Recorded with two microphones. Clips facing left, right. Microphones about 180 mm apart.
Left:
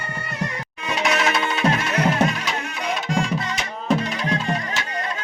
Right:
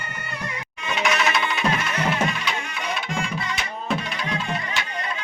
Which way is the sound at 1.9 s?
40° left (ahead or behind).